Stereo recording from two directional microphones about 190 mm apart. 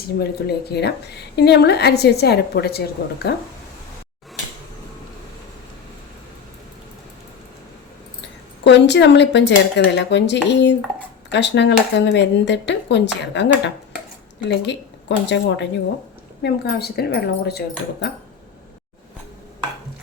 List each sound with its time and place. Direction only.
0.0 s speech: 55° left (ahead or behind)
8.6 s speech: 65° left (ahead or behind)